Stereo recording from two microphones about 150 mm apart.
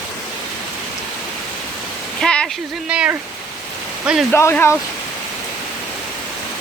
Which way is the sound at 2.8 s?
10° right (ahead or behind).